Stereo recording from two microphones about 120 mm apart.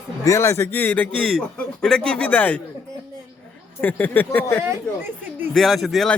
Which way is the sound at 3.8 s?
15° left (ahead or behind).